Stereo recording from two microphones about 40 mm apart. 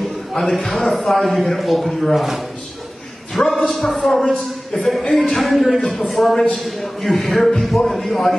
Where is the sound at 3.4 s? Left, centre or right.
Centre.